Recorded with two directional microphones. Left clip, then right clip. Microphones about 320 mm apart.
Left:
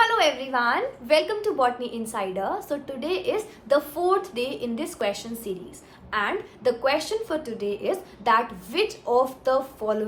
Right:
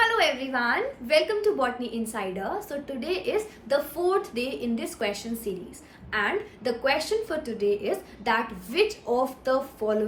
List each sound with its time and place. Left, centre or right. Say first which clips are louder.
0.0 s a woman's voice: left 2 dB; centre